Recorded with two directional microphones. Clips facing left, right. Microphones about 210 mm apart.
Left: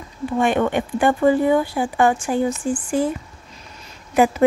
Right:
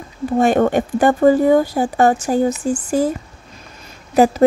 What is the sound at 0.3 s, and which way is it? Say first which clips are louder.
Speech: right 4 dB; 40° right (ahead or behind).